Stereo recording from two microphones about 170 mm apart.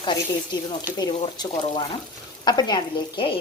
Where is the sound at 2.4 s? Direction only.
25° left (ahead or behind).